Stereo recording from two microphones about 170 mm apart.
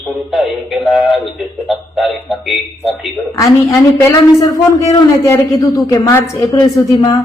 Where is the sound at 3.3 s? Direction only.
20° left (ahead or behind).